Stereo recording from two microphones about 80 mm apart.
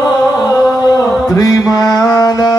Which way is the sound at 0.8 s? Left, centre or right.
Left.